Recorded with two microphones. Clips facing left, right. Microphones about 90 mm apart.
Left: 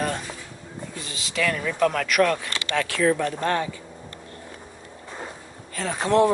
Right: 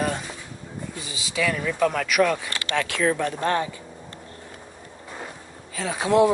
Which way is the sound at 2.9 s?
30° right (ahead or behind).